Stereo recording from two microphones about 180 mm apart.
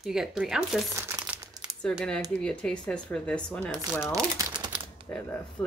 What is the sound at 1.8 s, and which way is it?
Speech, 5° left (ahead or behind).